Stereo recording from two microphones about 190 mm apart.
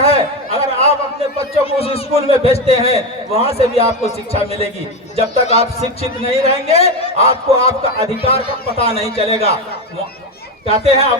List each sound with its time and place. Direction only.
0.0 s a sound: 30° left (ahead or behind)
1.4 s a man's voice: 30° left (ahead or behind)
10.7 s a man's voice: 30° left (ahead or behind)